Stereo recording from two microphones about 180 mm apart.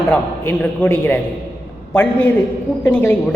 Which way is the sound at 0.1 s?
5° left (ahead or behind).